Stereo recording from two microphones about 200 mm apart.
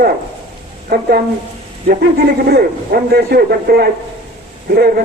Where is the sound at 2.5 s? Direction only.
50° right (ahead or behind).